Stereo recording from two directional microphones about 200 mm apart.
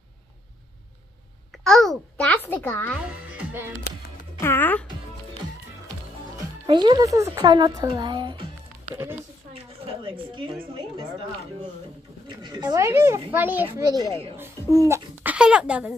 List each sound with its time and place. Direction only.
1.6 s babbling: centre (ahead or behind)
3.0 s music: 5° right (ahead or behind)
4.4 s speech: 10° left (ahead or behind)
6.3 s a woman's voice: 20° right (ahead or behind)
10.0 s a woman's voice: 25° right (ahead or behind)
12.3 s a woman's voice: 20° right (ahead or behind); by 15.9 s 5° right (ahead or behind)